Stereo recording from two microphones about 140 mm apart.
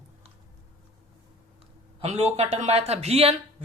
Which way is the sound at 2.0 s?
50° right (ahead or behind).